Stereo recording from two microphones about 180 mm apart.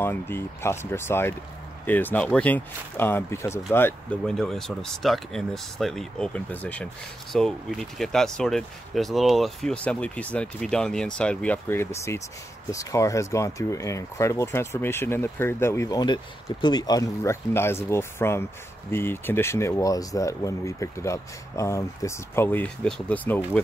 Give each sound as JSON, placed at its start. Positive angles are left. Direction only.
{"t": 0.0, "sound": "speech", "side_deg": 10}
{"t": 4.2, "sound": "speech", "side_deg": 0}